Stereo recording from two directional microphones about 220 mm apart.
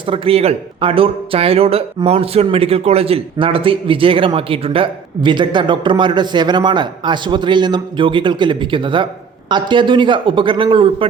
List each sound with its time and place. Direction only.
0.1 s a man's voice: 25° right (ahead or behind)